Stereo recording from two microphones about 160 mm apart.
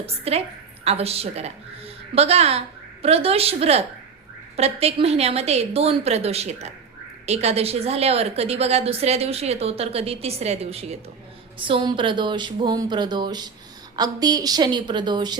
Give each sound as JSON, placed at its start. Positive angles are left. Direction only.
{"t": 0.0, "sound": "a woman's voice", "side_deg": -40}